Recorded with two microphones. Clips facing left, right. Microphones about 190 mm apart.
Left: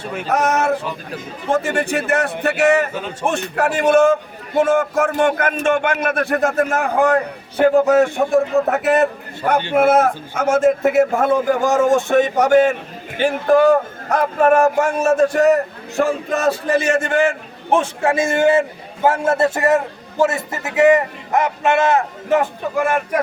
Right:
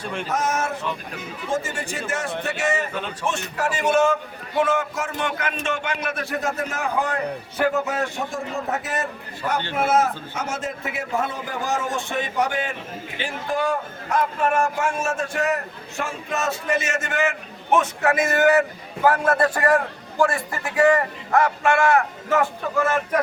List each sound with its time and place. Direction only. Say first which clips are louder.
0.0 s male singing: left 3 dB; 5° left (ahead or behind)
0.3 s male singing: left 7 dB; 65° left (ahead or behind)
1.5 s a man's voice: left 8 dB; 65° left (ahead or behind); by 8.1 s 45° left (ahead or behind)
8.3 s a man's voice: left 11 dB; 65° left (ahead or behind); by 13.3 s 45° left (ahead or behind)
14.1 s speech: left 5 dB; 60° left (ahead or behind)
14.4 s a man's voice: left 11 dB; 40° left (ahead or behind); by 23.0 s 15° left (ahead or behind)